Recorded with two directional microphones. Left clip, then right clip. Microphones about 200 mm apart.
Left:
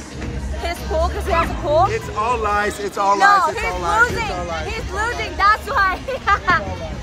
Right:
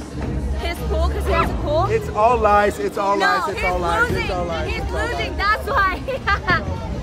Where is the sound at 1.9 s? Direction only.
50° right (ahead or behind).